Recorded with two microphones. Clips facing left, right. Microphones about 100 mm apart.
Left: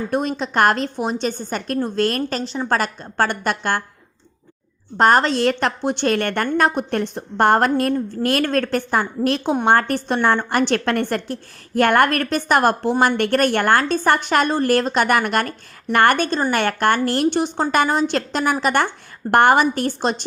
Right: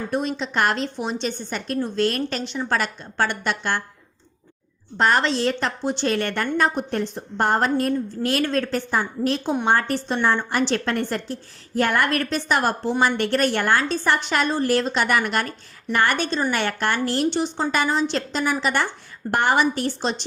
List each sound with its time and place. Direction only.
0.1 s a woman's voice: 50° left (ahead or behind)
4.9 s a woman's voice: 45° left (ahead or behind)
5.4 s a woman's voice: 60° left (ahead or behind)
9.6 s a woman's voice: 55° left (ahead or behind)